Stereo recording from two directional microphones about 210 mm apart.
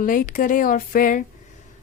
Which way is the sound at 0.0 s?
40° left (ahead or behind).